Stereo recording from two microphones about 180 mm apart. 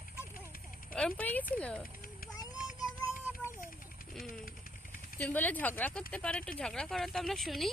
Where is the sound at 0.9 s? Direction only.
5° left (ahead or behind).